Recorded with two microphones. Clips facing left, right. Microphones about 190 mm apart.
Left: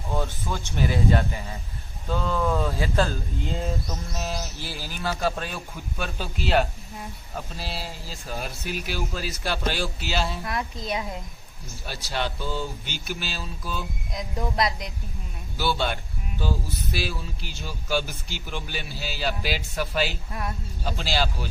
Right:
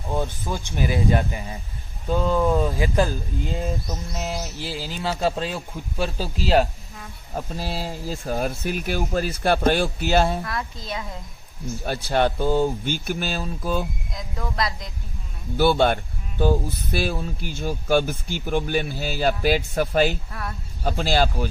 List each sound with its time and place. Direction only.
0.1 s speech: 15° right (ahead or behind); by 10.4 s 50° right (ahead or behind)
10.4 s a woman's voice: 20° left (ahead or behind)
11.8 s speech: 55° right (ahead or behind)
14.2 s speech: 20° left (ahead or behind)
15.5 s speech: 50° right (ahead or behind)